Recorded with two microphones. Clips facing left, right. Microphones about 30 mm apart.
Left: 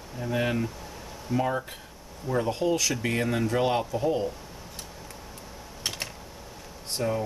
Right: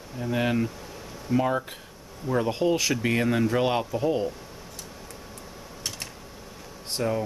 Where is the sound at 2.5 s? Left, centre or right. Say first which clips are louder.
Right 2 dB; centre.